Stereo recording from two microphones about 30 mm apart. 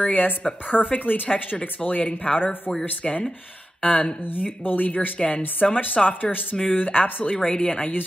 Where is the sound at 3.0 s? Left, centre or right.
Centre.